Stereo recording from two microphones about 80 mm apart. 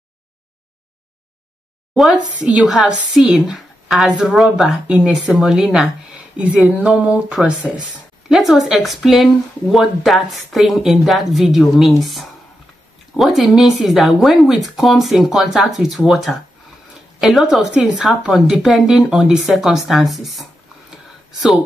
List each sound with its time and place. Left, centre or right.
2.4 s a woman's voice: centre
6.3 s a woman's voice: centre
8.3 s speech: centre